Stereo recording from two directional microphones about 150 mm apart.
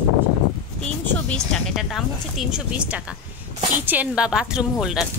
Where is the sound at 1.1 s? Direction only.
5° left (ahead or behind).